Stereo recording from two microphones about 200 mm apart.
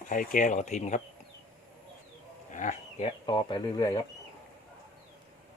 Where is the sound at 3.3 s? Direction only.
25° left (ahead or behind).